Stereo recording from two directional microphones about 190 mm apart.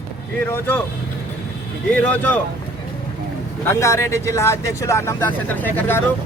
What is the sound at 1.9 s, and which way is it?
Speech, 10° left (ahead or behind).